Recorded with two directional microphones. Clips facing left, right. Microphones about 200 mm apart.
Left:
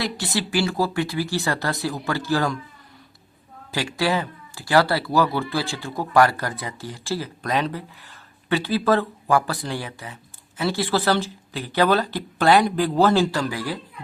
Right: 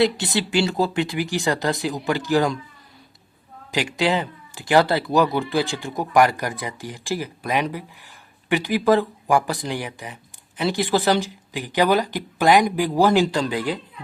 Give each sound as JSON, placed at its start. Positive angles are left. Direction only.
{"t": 0.0, "sound": "speech", "side_deg": -25}
{"t": 3.7, "sound": "speech", "side_deg": -15}